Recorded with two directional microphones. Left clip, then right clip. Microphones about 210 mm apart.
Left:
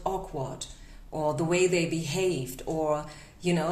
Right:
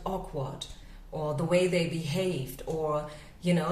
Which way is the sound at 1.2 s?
45° left (ahead or behind).